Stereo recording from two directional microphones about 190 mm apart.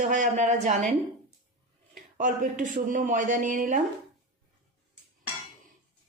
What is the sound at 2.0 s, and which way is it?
Speech, 45° right (ahead or behind).